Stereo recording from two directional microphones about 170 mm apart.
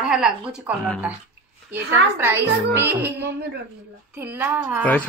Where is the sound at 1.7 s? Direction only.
90° right.